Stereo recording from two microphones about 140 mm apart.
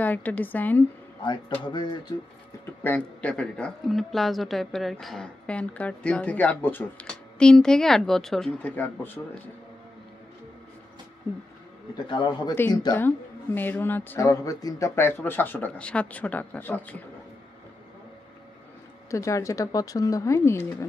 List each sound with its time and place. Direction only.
0.0 s a woman's voice: 10° left (ahead or behind)
1.6 s speech: 35° left (ahead or behind)
2.8 s a woman's voice: 10° left (ahead or behind)
12.1 s speech: 35° left (ahead or behind)
12.5 s a woman's voice: 15° left (ahead or behind)
19.0 s speech: 20° left (ahead or behind)